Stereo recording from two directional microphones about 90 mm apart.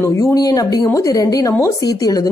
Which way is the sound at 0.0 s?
35° left (ahead or behind).